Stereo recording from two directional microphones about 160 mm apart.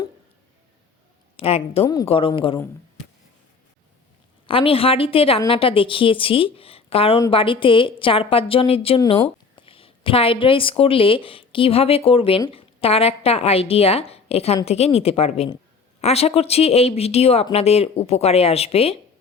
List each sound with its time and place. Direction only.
1.4 s a woman's voice: 35° left (ahead or behind)
4.4 s a woman's voice: 35° left (ahead or behind)